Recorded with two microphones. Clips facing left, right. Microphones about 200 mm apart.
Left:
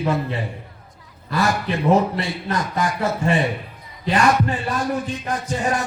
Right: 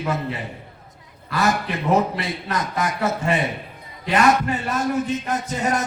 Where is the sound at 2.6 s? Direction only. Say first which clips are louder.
Even; 20° right (ahead or behind).